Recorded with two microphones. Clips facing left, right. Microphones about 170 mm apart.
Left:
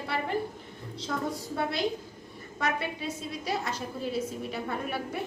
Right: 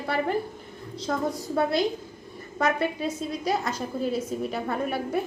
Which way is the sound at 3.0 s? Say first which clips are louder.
Right 6 dB; 45° right (ahead or behind).